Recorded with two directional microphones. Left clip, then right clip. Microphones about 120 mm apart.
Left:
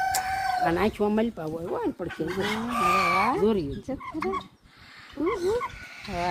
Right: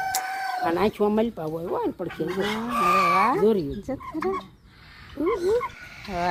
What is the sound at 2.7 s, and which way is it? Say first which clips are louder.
Speech: right 3 dB; 35° right (ahead or behind).